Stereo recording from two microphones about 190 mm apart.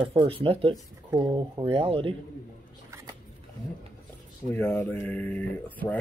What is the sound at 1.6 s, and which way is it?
Speech, 30° right (ahead or behind).